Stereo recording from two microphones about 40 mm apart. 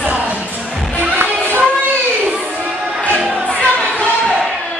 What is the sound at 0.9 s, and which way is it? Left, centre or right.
Music, right.